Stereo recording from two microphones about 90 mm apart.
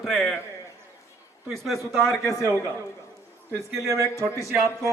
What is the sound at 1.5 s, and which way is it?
Speech, centre (ahead or behind).